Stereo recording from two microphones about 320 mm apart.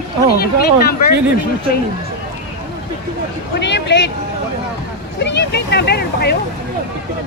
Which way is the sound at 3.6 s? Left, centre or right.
Left.